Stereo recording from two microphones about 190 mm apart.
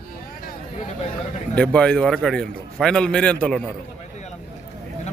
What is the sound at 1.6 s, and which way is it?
A man's voice, 5° left (ahead or behind).